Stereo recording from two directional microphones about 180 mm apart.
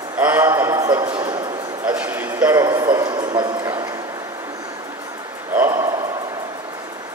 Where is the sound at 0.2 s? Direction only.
10° right (ahead or behind).